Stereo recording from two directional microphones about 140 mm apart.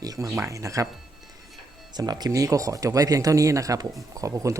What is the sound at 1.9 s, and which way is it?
Speech, 30° right (ahead or behind).